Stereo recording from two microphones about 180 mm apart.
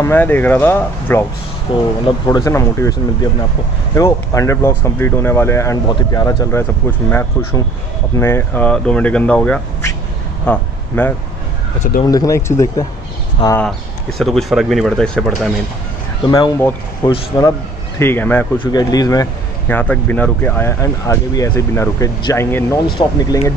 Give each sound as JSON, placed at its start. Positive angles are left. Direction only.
{"t": 0.0, "sound": "speech", "side_deg": 10}
{"t": 1.7, "sound": "speech", "side_deg": 25}
{"t": 12.0, "sound": "speech", "side_deg": 20}
{"t": 13.6, "sound": "speech", "side_deg": 0}
{"t": 16.3, "sound": "speech", "side_deg": 20}
{"t": 18.6, "sound": "speech", "side_deg": 20}
{"t": 19.7, "sound": "speech", "side_deg": 10}